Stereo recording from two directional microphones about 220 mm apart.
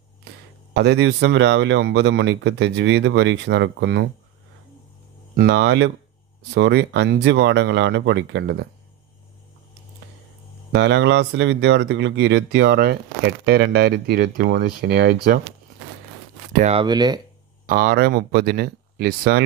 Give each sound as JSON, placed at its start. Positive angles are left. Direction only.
{"t": 0.7, "sound": "speech", "side_deg": -50}
{"t": 5.3, "sound": "speech", "side_deg": -50}
{"t": 10.7, "sound": "speech", "side_deg": -50}
{"t": 16.5, "sound": "speech", "side_deg": -30}
{"t": 16.8, "sound": "speech", "side_deg": -20}
{"t": 17.6, "sound": "speech", "side_deg": -45}